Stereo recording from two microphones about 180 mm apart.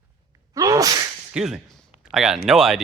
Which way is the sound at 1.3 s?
5° right (ahead or behind).